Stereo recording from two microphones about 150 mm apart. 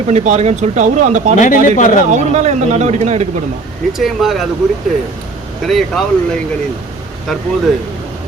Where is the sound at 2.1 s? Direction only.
50° right (ahead or behind).